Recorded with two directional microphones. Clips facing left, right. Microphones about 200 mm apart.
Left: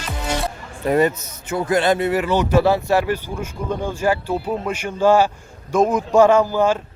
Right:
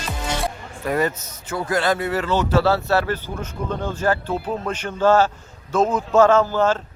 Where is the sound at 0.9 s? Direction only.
20° left (ahead or behind).